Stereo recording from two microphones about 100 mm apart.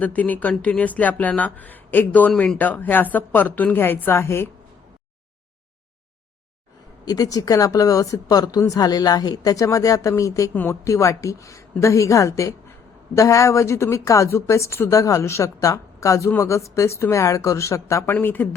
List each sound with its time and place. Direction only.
0.0 s speech: 15° left (ahead or behind)
7.0 s speech: 40° left (ahead or behind)
10.5 s a woman's voice: 20° left (ahead or behind)
10.8 s speech: 30° left (ahead or behind)